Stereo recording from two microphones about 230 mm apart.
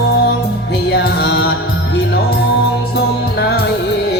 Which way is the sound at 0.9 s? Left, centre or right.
Left.